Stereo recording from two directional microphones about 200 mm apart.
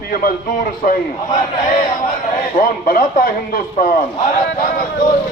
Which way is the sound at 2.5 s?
40° left (ahead or behind).